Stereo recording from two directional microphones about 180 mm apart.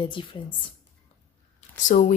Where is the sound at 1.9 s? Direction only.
45° left (ahead or behind).